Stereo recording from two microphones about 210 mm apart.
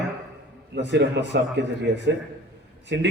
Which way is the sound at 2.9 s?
55° right (ahead or behind).